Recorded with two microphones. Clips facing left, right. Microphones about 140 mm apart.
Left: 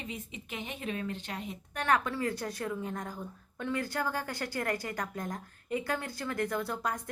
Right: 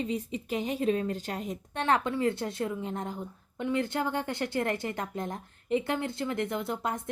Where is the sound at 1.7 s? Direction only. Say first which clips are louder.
Right 2 dB; 25° right (ahead or behind).